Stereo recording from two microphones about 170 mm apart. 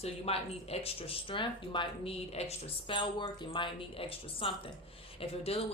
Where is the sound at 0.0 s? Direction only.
35° left (ahead or behind).